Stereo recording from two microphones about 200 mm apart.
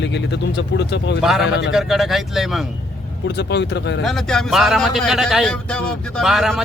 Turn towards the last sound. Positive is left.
turn(degrees=0)  # may be behind; listen again after turning